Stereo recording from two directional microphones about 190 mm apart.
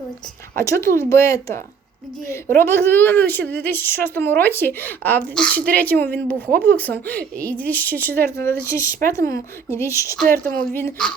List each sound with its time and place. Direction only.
0.5 s a woman's voice: 15° left (ahead or behind)
10.4 s speech: 50° right (ahead or behind)
10.8 s a woman's voice: 10° left (ahead or behind)